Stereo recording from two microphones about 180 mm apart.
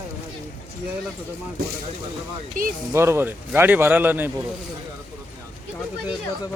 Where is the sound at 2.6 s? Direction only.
50° right (ahead or behind).